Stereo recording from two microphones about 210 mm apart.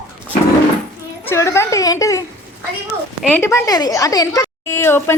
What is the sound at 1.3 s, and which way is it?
A woman's voice, 15° left (ahead or behind).